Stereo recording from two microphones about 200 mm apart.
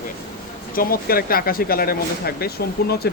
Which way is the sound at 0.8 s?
50° left (ahead or behind).